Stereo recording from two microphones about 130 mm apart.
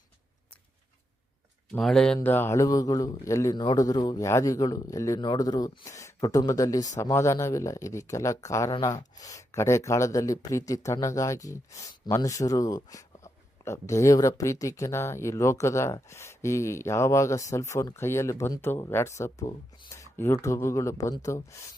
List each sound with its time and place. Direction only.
1.8 s speech: 5° left (ahead or behind)
2.2 s speech: 15° left (ahead or behind)